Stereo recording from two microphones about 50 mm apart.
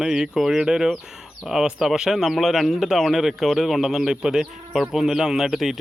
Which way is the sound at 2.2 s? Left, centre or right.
Centre.